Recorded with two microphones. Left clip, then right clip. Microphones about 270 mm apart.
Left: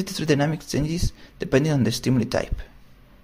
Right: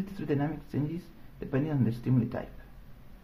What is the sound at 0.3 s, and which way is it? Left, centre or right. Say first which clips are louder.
Speech: left 10 dB; left.